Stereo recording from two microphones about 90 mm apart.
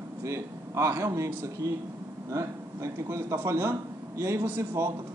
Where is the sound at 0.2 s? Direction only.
30° right (ahead or behind).